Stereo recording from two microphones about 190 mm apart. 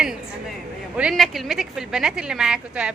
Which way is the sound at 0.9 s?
Centre (ahead or behind).